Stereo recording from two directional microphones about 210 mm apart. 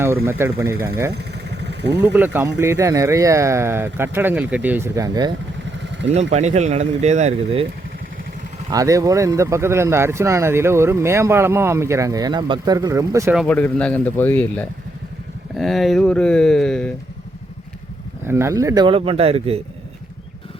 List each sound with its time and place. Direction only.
0.3 s speech: 10° right (ahead or behind)
1.1 s vehicle: 55° right (ahead or behind)
2.1 s speech: 10° right (ahead or behind)
6.3 s speech: 35° right (ahead or behind)
8.7 s speech: 15° right (ahead or behind)
13.3 s speech: 5° left (ahead or behind)
18.3 s speech: 10° right (ahead or behind); by 19.5 s 30° right (ahead or behind)